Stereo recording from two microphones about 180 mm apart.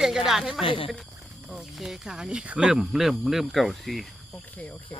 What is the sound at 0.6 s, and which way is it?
Speech, 30° left (ahead or behind).